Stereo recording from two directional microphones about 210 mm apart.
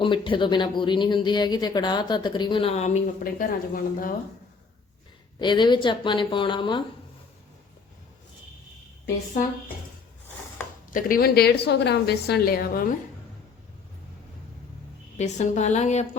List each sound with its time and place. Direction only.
0.0 s speech: 25° left (ahead or behind); by 4.1 s 40° left (ahead or behind)
5.4 s speech: 20° left (ahead or behind)
10.9 s a woman's voice: 45° left (ahead or behind)
15.2 s a woman's voice: 35° left (ahead or behind)